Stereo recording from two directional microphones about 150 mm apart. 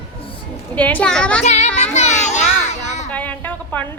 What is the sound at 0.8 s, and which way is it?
Speech, 10° left (ahead or behind).